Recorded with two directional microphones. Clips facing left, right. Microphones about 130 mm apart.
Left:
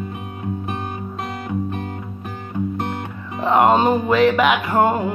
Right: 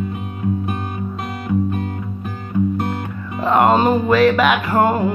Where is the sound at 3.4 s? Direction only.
15° left (ahead or behind).